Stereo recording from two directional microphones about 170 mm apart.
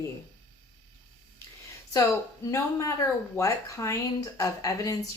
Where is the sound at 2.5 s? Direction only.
15° left (ahead or behind).